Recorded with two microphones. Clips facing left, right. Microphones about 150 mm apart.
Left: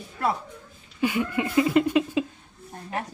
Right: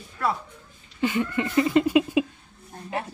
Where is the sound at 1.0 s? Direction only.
10° left (ahead or behind).